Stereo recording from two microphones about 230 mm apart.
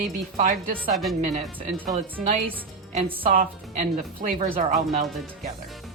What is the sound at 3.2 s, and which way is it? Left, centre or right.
Speech, right.